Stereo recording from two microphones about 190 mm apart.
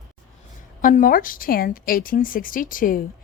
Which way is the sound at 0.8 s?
45° left (ahead or behind).